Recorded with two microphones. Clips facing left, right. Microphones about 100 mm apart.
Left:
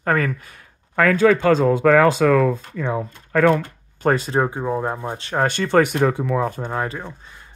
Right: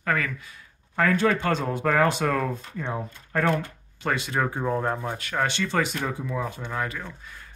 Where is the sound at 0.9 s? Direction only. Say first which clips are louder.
Left 7 dB; 90° left.